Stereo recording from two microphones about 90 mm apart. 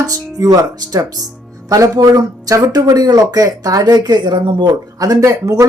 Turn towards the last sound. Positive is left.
turn(degrees=-35)  # may be behind; listen again after turning